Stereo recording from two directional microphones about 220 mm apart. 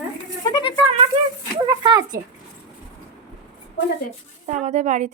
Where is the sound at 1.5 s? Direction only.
20° right (ahead or behind).